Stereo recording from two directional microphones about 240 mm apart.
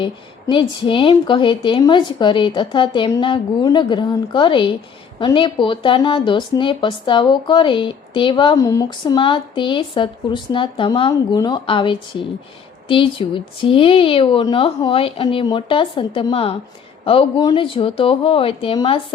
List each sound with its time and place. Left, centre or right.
0.5 s speech: left